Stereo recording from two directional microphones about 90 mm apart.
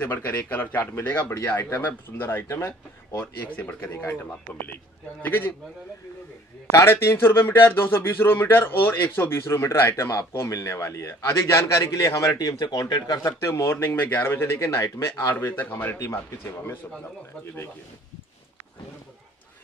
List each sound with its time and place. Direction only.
0.0 s speech: 20° left (ahead or behind)
2.4 s speech: 35° left (ahead or behind)
5.2 s speech: 25° left (ahead or behind)
6.7 s a man's voice: 30° left (ahead or behind); by 13.3 s 45° left (ahead or behind)
13.4 s speech: 30° left (ahead or behind)